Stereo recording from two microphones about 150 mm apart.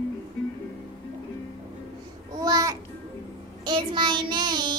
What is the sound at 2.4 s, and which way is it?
Babbling, 25° right (ahead or behind).